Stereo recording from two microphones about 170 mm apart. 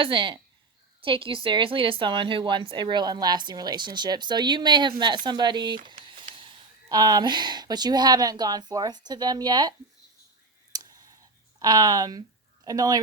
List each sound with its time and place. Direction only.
0.0 s a woman's voice: 30° right (ahead or behind)
10.7 s a sound: 25° right (ahead or behind)
11.6 s a woman's voice: 20° right (ahead or behind)